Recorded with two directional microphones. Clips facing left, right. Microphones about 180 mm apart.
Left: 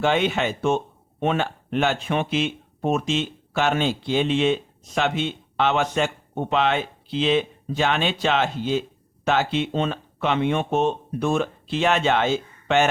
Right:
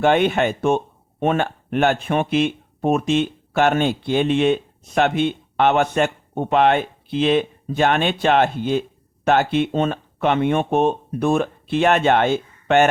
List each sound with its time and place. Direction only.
0.0 s speech: 55° right (ahead or behind)